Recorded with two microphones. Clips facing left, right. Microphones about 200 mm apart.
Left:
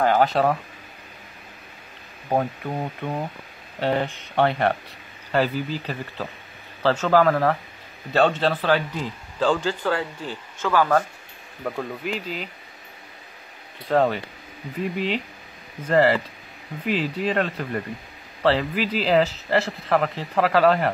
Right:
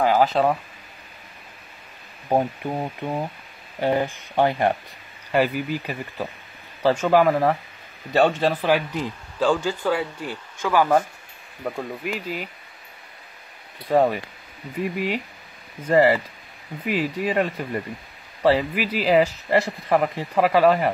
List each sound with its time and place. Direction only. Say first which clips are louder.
0.0 s speech: even; 5° right (ahead or behind)
2.2 s a man's voice: right 2 dB; 15° right (ahead or behind)
11.6 s speech: even; 5° right (ahead or behind)
13.8 s a man's voice: right 1 dB; 10° right (ahead or behind)